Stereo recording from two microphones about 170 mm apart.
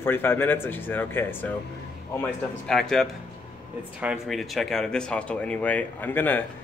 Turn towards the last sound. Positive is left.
turn(degrees=10)  # may be behind; listen again after turning